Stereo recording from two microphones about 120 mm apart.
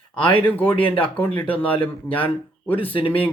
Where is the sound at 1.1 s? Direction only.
15° left (ahead or behind).